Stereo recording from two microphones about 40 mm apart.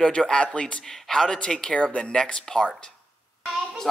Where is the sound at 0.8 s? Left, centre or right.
Centre.